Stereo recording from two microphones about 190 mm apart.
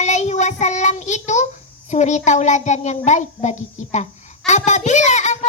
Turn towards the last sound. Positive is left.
turn(degrees=40)  # may be behind; listen again after turning